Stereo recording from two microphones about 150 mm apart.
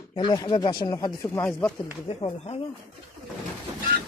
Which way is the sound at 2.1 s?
40° left (ahead or behind).